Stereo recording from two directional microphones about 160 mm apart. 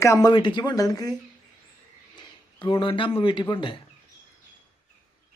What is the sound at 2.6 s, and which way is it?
Speech, 30° left (ahead or behind).